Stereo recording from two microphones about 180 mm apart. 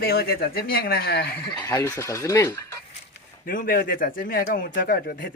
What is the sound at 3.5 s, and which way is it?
Speech, 55° left (ahead or behind).